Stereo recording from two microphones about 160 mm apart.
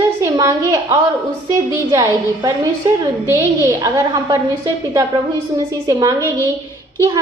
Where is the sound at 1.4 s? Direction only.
20° right (ahead or behind).